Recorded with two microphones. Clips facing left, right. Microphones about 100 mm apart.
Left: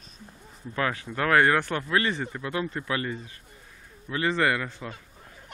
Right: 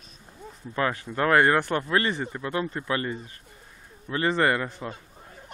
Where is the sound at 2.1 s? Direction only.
15° right (ahead or behind).